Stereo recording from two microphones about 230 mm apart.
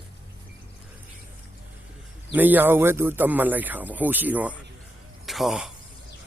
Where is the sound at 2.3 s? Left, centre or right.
Centre.